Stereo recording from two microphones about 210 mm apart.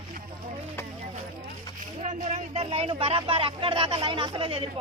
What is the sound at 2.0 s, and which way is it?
Speech, 35° right (ahead or behind).